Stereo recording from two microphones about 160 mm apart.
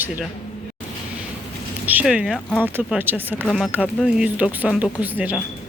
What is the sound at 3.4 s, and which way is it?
Speech, centre (ahead or behind).